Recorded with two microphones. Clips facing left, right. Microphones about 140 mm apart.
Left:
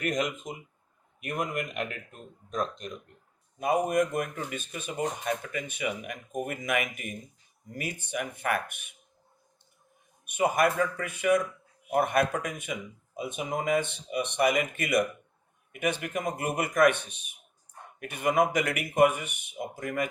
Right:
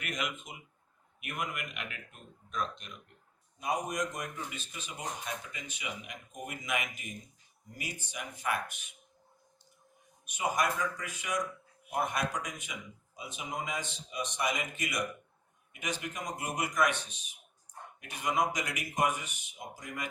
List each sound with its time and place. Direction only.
0.0 s speech: 40° left (ahead or behind)
3.6 s speech: 55° left (ahead or behind)
10.2 s speech: 55° left (ahead or behind)